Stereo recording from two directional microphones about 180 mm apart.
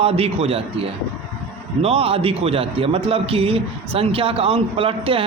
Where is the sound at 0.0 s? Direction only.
35° right (ahead or behind).